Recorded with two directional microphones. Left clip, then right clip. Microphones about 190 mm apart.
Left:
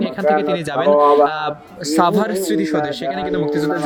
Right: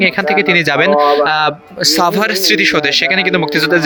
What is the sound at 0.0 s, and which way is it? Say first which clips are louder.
Speech: right 5 dB; 15° right (ahead or behind).